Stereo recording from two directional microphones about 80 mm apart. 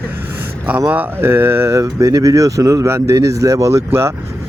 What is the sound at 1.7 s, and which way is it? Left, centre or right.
Speech, right.